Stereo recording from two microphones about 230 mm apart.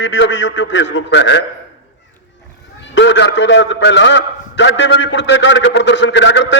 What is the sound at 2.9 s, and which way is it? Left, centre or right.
A man's voice, left.